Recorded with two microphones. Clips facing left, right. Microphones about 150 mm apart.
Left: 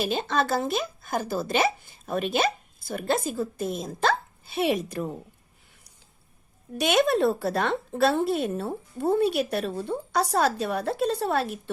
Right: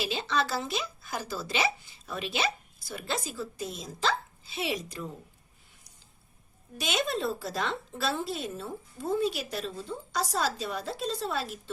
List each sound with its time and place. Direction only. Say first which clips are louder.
0.0 s speech: left 4 dB; 50° left (ahead or behind)
6.7 s speech: left 9 dB; 60° left (ahead or behind)